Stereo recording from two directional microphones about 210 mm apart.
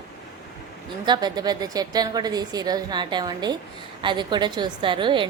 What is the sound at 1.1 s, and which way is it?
A woman's voice, 20° right (ahead or behind).